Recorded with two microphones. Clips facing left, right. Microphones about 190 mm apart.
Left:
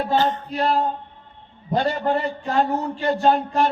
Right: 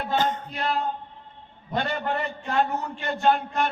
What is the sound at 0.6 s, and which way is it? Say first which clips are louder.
A man's voice: left 6 dB; 35° left (ahead or behind).